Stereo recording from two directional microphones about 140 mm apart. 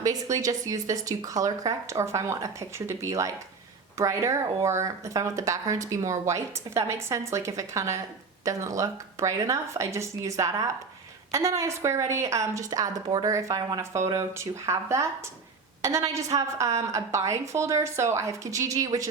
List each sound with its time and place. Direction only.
0.0 s speech: 25° right (ahead or behind)